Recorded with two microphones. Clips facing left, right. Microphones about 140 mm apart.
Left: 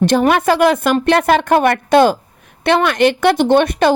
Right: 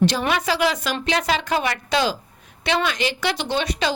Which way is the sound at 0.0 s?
50° left (ahead or behind).